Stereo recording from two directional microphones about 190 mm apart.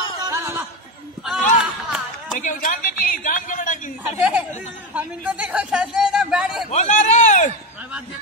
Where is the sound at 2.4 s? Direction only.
45° left (ahead or behind).